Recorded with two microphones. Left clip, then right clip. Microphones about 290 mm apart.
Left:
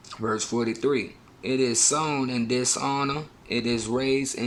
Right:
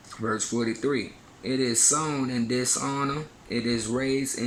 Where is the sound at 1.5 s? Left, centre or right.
Centre.